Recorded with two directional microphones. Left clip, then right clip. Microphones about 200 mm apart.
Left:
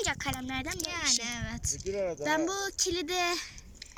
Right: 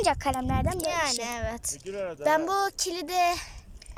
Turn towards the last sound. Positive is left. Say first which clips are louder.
# even
turn(degrees=0)  # may be behind; listen again after turning